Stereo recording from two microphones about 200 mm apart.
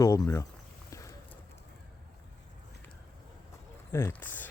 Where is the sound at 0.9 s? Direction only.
15° left (ahead or behind).